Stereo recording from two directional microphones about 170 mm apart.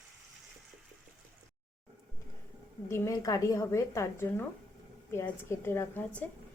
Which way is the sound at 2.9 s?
20° left (ahead or behind).